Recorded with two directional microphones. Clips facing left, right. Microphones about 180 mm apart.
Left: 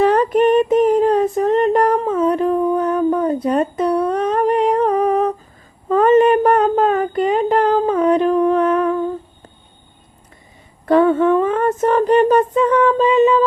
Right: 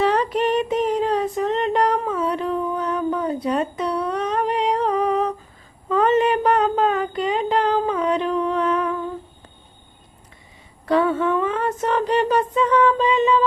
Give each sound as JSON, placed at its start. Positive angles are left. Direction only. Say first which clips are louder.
{"t": 0.0, "sound": "female singing", "louder": "left 6 dB", "side_deg": 50}
{"t": 3.4, "sound": "humming", "louder": "left 5 dB", "side_deg": 50}
{"t": 5.9, "sound": "child singing", "louder": "left 6 dB", "side_deg": 50}
{"t": 10.8, "sound": "a sound", "louder": "left 6 dB", "side_deg": 50}